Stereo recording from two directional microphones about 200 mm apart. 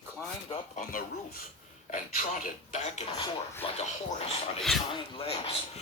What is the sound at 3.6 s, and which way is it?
Speech, 30° left (ahead or behind).